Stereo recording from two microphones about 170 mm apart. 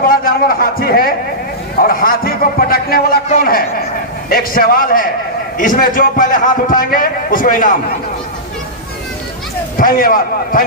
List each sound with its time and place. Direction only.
0.0 s a man's voice: 55° left (ahead or behind)
9.7 s a man's voice: 55° left (ahead or behind)